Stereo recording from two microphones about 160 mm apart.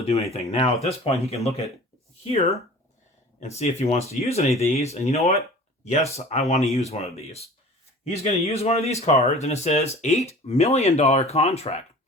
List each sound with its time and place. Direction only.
0.0 s speech: 40° left (ahead or behind)
3.4 s speech: 45° left (ahead or behind)